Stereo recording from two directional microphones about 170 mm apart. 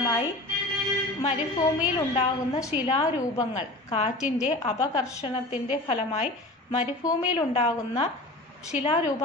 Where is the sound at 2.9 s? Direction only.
30° left (ahead or behind).